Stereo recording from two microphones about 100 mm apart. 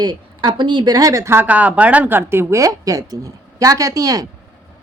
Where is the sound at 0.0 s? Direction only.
45° right (ahead or behind); by 1.5 s 25° right (ahead or behind).